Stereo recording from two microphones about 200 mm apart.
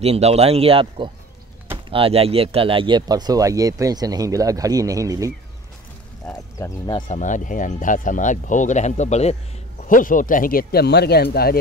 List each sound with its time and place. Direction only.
0.0 s speech: 30° right (ahead or behind)
6.2 s speech: 20° left (ahead or behind)
7.1 s speech: 40° left (ahead or behind); by 11.2 s 55° left (ahead or behind)